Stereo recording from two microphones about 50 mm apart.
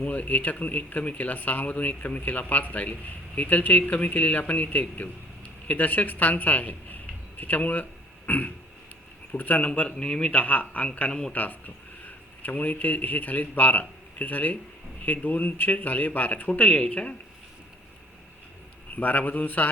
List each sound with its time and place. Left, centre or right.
0.0 s speech: left
9.6 s speech: left
10.3 s speech: left
11.1 s speech: centre
12.0 s speech: left
16.5 s speech: left
18.9 s speech: left